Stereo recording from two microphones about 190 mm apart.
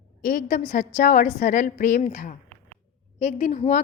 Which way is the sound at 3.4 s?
40° left (ahead or behind).